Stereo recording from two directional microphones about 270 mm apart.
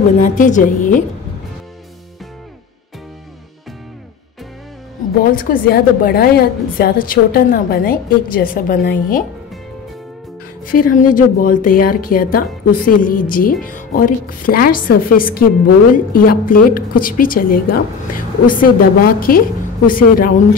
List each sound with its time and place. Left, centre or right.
0.2 s a woman's voice: left
5.2 s a woman's voice: left
10.6 s a woman's voice: left